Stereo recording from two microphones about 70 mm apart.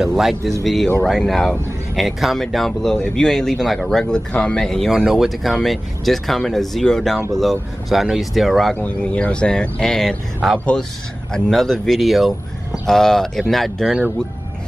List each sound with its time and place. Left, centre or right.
0.0 s speech: centre
4.0 s speech: centre
4.6 s speech: centre
4.9 s speech: centre
8.8 s speech: centre
10.6 s speech: centre